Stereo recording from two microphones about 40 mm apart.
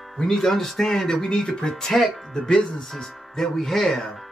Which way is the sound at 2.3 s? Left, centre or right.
Centre.